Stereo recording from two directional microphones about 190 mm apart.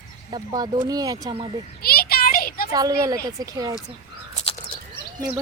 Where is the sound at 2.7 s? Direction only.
20° right (ahead or behind).